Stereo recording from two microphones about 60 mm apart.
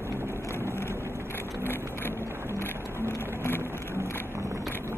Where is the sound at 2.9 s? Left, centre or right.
Left.